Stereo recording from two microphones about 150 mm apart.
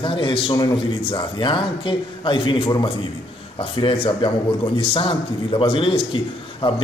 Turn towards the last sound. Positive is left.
turn(degrees=35)  # may be behind; listen again after turning